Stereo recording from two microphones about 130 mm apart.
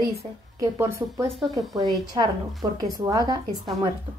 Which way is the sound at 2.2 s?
35° right (ahead or behind).